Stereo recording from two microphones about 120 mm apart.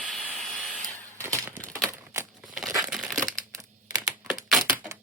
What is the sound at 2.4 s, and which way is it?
Crumpling, 5° right (ahead or behind).